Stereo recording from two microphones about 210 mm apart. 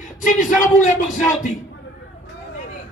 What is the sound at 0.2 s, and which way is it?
Speech, 35° left (ahead or behind).